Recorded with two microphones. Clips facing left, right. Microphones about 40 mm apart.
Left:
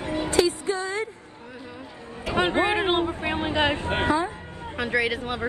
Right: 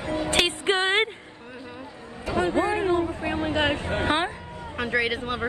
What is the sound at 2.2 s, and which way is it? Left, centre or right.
Speech, left.